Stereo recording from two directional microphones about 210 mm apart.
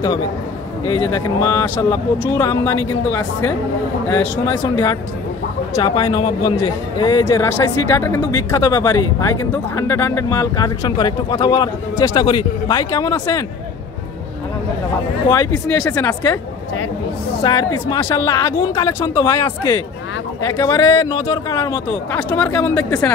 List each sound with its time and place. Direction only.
0.8 s speech: 20° left (ahead or behind)
15.9 s speech: 15° left (ahead or behind)
17.4 s speech: 20° left (ahead or behind)